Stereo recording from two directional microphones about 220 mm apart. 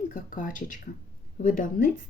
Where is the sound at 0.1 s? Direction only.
35° left (ahead or behind).